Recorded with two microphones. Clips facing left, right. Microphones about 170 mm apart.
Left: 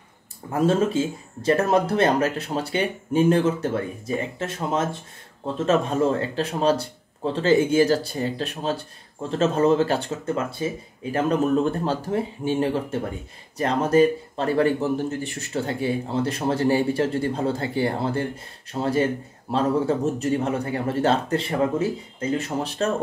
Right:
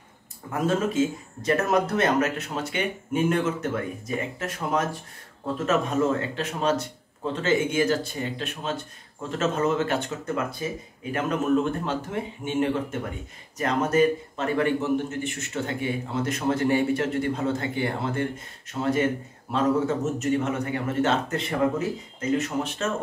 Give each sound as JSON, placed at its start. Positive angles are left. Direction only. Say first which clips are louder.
{"t": 0.5, "sound": "a man's voice", "louder": "left 4 dB", "side_deg": 30}